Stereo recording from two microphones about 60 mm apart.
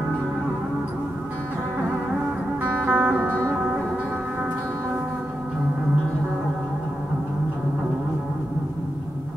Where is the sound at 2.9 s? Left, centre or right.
Right.